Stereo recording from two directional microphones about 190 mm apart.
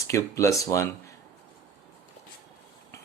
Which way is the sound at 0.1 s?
15° left (ahead or behind).